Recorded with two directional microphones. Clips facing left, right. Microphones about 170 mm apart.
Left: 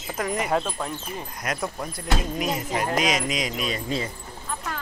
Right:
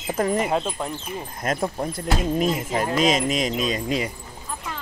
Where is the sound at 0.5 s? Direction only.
15° right (ahead or behind).